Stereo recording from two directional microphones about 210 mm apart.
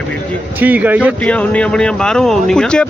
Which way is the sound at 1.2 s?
5° left (ahead or behind).